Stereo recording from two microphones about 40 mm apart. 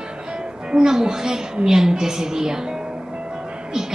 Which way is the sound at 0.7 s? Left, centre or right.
Centre.